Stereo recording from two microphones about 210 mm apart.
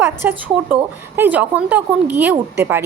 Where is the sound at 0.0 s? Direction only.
10° right (ahead or behind).